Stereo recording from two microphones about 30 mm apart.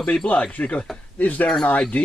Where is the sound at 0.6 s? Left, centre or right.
Left.